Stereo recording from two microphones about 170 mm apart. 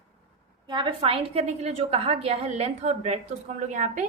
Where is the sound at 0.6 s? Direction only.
25° right (ahead or behind); by 4.0 s 45° right (ahead or behind).